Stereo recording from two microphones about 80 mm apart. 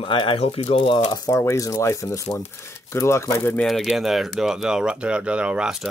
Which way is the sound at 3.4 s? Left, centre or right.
Centre.